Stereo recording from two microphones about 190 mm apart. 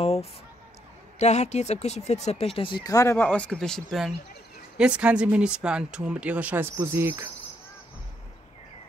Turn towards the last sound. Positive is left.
turn(degrees=-15)  # may be behind; listen again after turning